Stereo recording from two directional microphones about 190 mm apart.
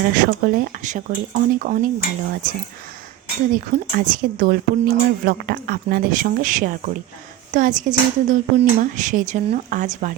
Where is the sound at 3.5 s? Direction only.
45° right (ahead or behind).